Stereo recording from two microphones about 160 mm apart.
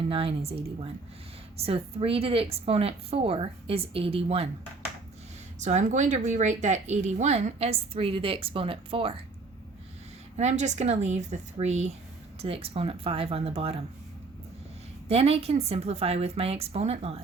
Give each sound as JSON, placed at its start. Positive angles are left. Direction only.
{"t": 0.1, "sound": "a woman's voice", "side_deg": -35}
{"t": 5.5, "sound": "a woman's voice", "side_deg": -45}
{"t": 10.3, "sound": "a woman's voice", "side_deg": -45}
{"t": 15.0, "sound": "a woman's voice", "side_deg": -40}